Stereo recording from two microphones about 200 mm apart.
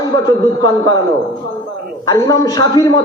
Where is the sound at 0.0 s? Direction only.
20° left (ahead or behind).